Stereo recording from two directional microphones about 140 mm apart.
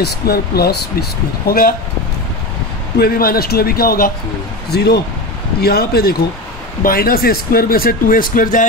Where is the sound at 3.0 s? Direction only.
90° left.